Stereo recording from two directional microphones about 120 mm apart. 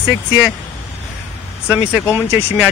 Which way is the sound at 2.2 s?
20° right (ahead or behind).